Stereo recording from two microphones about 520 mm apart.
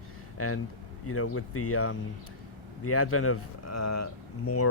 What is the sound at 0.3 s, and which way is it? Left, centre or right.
Speech, left.